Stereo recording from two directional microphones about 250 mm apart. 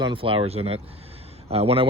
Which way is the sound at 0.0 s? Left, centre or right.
Right.